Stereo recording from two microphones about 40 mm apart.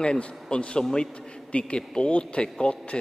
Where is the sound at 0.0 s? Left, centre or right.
Left.